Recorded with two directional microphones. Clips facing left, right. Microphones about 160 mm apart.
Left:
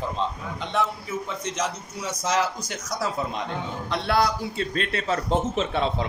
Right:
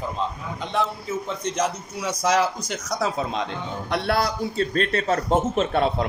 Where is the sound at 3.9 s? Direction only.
55° right (ahead or behind).